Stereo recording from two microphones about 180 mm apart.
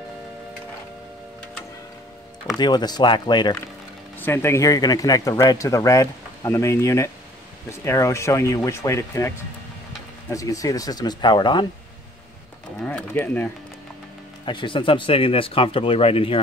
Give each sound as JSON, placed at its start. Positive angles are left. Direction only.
{"t": 2.5, "sound": "speech", "side_deg": 25}
{"t": 4.2, "sound": "speech", "side_deg": 15}
{"t": 10.3, "sound": "speech", "side_deg": 20}
{"t": 12.8, "sound": "speech", "side_deg": 10}
{"t": 14.4, "sound": "speech", "side_deg": 25}